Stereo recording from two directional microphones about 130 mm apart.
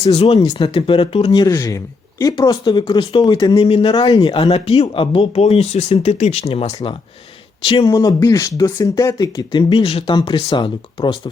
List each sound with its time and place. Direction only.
0.0 s speech: 50° left (ahead or behind)
2.2 s speech: 25° left (ahead or behind)
2.5 s speech: 40° left (ahead or behind)
7.9 s speech: 30° left (ahead or behind)